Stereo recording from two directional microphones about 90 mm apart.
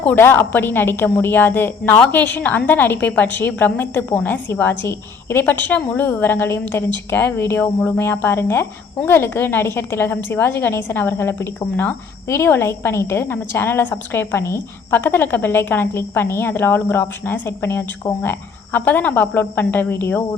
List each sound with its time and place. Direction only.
0.0 s a woman's voice: 20° left (ahead or behind)
7.6 s speech: 15° left (ahead or behind)
7.9 s a woman's voice: 25° left (ahead or behind)